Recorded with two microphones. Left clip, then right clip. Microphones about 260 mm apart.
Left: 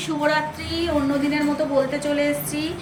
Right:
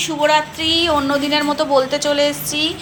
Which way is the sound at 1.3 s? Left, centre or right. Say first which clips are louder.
Right 6 dB; right.